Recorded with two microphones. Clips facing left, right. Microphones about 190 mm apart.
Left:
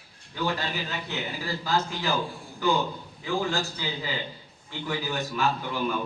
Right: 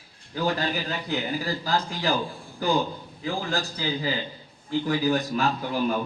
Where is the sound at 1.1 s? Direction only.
35° right (ahead or behind).